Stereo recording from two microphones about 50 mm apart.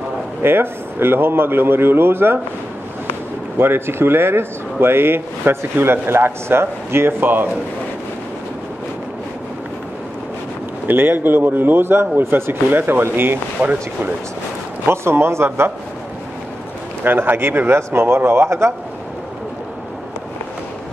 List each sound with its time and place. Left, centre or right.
0.4 s speech: right
3.5 s speech: right
10.9 s speech: right
13.6 s speech: right
14.9 s a man's voice: right
17.0 s speech: right